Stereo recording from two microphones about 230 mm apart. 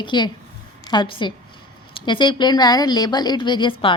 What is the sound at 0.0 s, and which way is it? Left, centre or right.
A woman's voice, centre.